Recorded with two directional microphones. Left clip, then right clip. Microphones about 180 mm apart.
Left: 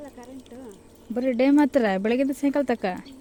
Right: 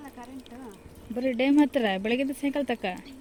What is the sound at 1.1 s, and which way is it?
Speech, 15° left (ahead or behind).